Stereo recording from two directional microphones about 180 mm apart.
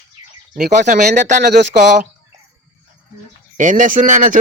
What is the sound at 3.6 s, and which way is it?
Speech, 45° right (ahead or behind).